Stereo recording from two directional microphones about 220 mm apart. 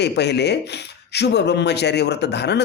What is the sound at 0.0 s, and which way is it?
Speech, 50° left (ahead or behind).